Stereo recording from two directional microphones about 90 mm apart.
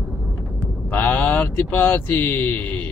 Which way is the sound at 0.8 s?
20° left (ahead or behind).